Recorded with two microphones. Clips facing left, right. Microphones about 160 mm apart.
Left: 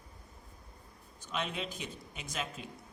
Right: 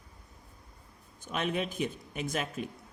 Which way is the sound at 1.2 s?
55° right (ahead or behind).